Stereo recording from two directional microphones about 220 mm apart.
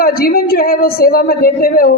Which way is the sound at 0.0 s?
40° left (ahead or behind).